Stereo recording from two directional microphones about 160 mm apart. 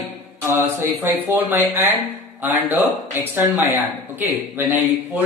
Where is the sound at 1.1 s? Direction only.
10° right (ahead or behind).